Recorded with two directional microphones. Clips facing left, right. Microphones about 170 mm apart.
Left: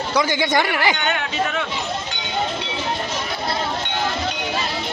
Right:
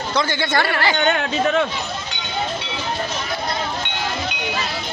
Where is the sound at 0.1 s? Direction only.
15° left (ahead or behind).